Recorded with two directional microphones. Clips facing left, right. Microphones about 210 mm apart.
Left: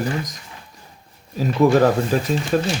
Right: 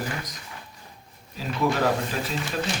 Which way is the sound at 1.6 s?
45° left (ahead or behind).